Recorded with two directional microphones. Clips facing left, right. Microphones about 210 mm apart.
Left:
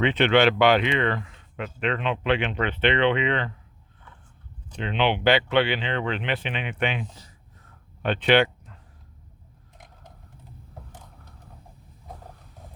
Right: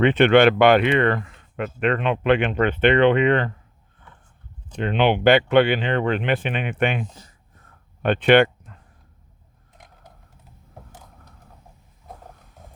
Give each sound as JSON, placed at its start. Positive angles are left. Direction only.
{"t": 0.0, "sound": "speech", "side_deg": -50}
{"t": 4.8, "sound": "speech", "side_deg": -50}